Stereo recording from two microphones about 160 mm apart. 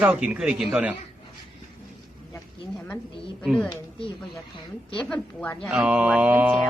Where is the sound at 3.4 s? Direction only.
5° left (ahead or behind).